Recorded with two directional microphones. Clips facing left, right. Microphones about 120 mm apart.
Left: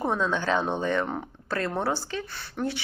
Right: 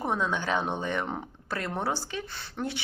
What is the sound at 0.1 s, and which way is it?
Speech, 15° right (ahead or behind).